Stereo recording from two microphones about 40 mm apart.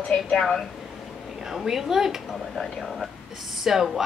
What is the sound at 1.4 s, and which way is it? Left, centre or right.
Speech, centre.